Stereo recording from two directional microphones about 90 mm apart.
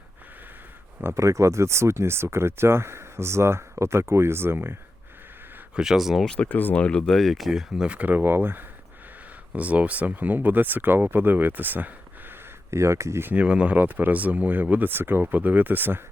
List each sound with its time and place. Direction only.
1.0 s speech: 35° right (ahead or behind)
5.7 s speech: 5° right (ahead or behind)
6.2 s speech: 15° left (ahead or behind); by 11.9 s 20° right (ahead or behind)
12.7 s speech: 35° right (ahead or behind)
13.3 s speech: 15° right (ahead or behind)